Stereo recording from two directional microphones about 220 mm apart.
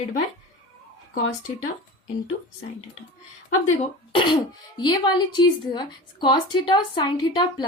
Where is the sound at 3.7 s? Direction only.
25° left (ahead or behind).